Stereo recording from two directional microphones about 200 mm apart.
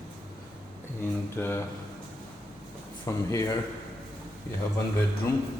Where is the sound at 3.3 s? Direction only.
15° left (ahead or behind).